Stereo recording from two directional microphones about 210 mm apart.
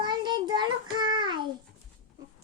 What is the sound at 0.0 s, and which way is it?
Child singing, 20° right (ahead or behind).